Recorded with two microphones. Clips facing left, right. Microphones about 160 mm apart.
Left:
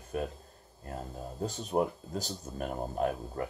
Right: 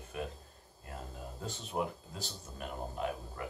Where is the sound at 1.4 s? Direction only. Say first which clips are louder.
Left 7 dB; 40° left (ahead or behind).